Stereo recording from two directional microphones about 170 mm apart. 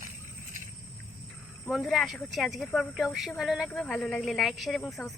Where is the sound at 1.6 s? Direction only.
Centre (ahead or behind).